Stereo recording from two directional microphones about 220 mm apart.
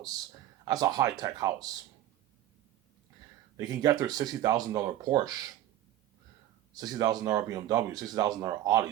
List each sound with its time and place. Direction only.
0.6 s speech: 15° right (ahead or behind)
3.6 s speech: 15° right (ahead or behind)
6.7 s speech: 15° right (ahead or behind)